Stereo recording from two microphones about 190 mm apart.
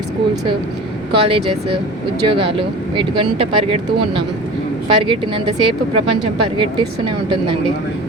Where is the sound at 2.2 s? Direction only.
30° right (ahead or behind).